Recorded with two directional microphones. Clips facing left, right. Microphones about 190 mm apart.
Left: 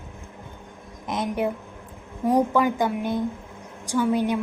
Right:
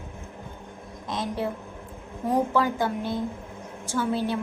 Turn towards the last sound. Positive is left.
turn(degrees=15)  # may be behind; listen again after turning